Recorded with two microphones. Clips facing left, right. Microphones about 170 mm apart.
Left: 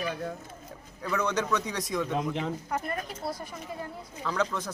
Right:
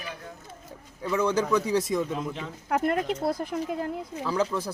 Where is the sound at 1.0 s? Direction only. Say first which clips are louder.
Right 4 dB; 30° right (ahead or behind).